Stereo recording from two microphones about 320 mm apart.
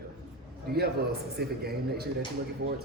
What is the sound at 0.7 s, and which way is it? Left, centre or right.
A man's voice, right.